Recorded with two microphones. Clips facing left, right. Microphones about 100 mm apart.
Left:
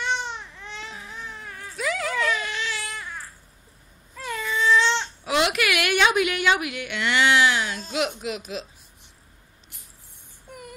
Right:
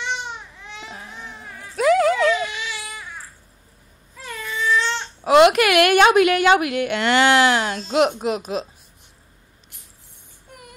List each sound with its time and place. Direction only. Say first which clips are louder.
0.1 s baby cry: left 1 dB; 5° right (ahead or behind)
0.9 s baby cry: right 1 dB; 35° right (ahead or behind)
1.8 s a sound: right 12 dB; 45° right (ahead or behind)
2.4 s baby cry: right 1 dB; 10° right (ahead or behind)
4.2 s baby cry: left 2 dB; centre (ahead or behind)
5.2 s a woman's voice: right 11 dB; 50° right (ahead or behind)